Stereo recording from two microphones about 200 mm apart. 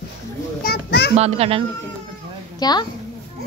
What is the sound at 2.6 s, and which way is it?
Speech, 20° left (ahead or behind).